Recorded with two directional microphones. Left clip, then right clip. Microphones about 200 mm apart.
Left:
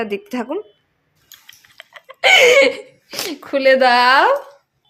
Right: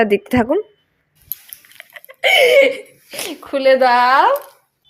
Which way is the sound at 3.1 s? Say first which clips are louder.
Left 1 dB; 15° left (ahead or behind).